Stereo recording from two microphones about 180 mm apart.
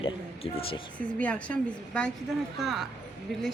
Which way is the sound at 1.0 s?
5° left (ahead or behind).